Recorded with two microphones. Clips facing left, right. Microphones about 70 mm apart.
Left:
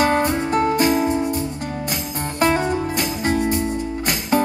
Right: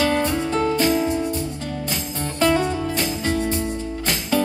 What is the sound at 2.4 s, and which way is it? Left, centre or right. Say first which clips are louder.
Music: left 1 dB; left.